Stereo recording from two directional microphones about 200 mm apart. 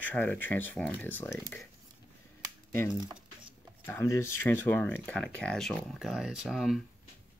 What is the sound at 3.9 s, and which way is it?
Speech, 15° left (ahead or behind).